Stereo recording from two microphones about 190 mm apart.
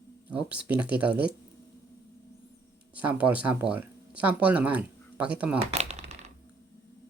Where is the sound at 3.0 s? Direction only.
10° right (ahead or behind).